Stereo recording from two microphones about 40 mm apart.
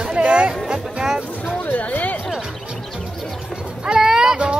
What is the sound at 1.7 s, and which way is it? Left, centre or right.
Music, left.